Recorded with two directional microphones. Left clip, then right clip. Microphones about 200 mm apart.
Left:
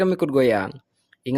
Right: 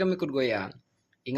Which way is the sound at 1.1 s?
55° left (ahead or behind).